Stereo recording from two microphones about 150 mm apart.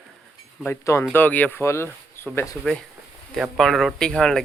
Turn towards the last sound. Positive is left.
turn(degrees=5)  # may be behind; listen again after turning